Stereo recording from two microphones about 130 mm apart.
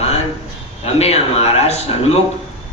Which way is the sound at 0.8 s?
50° left (ahead or behind).